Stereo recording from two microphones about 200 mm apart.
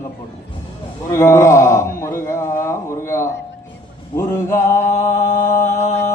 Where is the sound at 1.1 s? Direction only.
15° left (ahead or behind).